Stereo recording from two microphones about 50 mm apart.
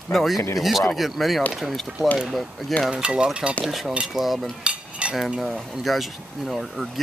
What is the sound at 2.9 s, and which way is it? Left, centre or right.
Speech, centre.